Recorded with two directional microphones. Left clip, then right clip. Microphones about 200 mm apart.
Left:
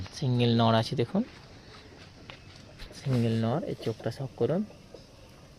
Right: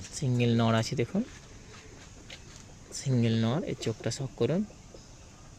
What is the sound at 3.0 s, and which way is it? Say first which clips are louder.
Speech: even; 15° right (ahead or behind).